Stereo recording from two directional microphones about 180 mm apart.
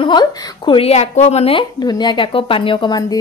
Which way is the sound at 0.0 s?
25° left (ahead or behind).